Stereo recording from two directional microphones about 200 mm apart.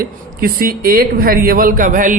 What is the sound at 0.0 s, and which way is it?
A man's voice, 45° right (ahead or behind).